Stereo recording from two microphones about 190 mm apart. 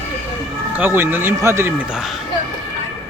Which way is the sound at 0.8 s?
10° right (ahead or behind).